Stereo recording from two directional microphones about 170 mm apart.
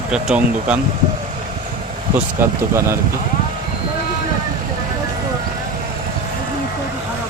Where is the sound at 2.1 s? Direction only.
15° right (ahead or behind).